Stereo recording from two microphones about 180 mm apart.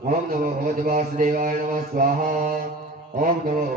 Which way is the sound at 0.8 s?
45° right (ahead or behind).